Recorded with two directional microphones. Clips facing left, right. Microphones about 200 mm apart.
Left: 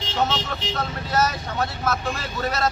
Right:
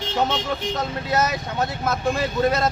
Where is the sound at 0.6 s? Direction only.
55° right (ahead or behind).